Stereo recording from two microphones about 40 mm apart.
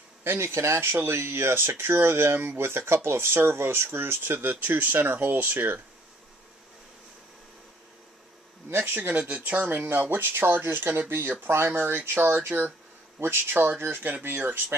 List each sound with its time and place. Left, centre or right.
0.2 s speech: right
8.6 s speech: right
8.9 s speech: right
10.1 s speech: right
11.7 s speech: right
12.3 s speech: right
13.2 s speech: right
13.7 s speech: right